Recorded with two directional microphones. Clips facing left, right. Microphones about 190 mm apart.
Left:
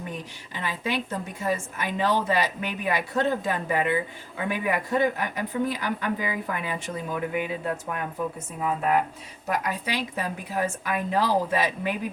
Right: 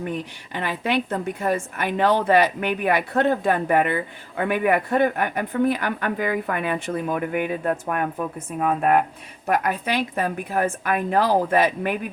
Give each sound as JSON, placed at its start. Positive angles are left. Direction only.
{"t": 0.5, "sound": "speech", "side_deg": -65}